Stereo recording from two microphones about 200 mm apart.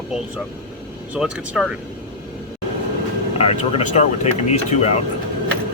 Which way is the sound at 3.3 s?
30° left (ahead or behind).